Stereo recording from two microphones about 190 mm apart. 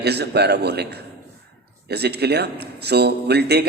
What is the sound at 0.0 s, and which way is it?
Speech, 60° right (ahead or behind).